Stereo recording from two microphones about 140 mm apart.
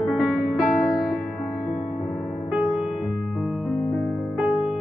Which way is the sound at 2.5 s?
5° right (ahead or behind).